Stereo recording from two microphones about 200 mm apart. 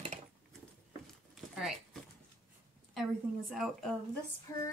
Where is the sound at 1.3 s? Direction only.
Centre (ahead or behind).